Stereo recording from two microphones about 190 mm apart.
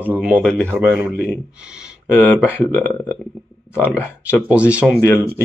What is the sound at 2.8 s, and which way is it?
Speech, 10° left (ahead or behind).